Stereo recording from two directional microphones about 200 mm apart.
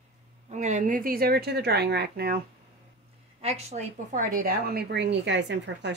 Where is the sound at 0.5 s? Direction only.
35° right (ahead or behind); by 2.3 s 50° right (ahead or behind).